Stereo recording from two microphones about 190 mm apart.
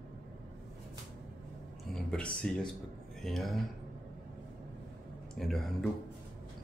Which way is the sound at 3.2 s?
Centre (ahead or behind).